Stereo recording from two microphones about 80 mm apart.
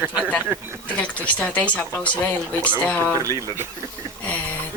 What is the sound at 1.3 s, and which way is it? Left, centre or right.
Speech, centre.